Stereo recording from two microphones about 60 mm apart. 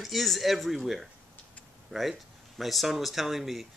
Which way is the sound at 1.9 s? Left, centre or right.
Centre.